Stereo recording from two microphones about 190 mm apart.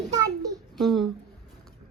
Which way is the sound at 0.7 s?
Centre (ahead or behind).